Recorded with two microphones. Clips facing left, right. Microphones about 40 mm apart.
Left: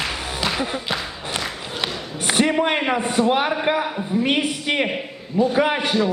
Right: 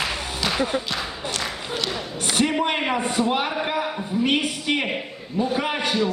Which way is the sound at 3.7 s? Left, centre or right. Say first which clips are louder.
Left 4 dB; centre.